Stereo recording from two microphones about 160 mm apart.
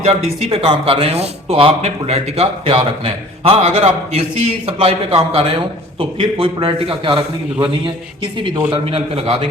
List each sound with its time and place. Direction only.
0.0 s speech: 40° right (ahead or behind)
8.7 s speech: 35° right (ahead or behind)